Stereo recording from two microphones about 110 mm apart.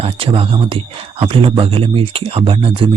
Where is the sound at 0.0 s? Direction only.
60° right (ahead or behind).